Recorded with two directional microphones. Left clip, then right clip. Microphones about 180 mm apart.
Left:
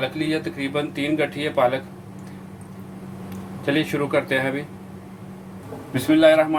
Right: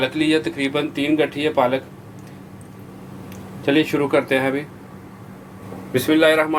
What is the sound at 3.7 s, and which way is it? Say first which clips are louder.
Speech: right 4 dB; 15° right (ahead or behind).